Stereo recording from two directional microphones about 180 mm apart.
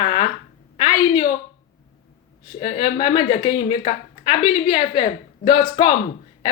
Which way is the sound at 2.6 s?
30° left (ahead or behind).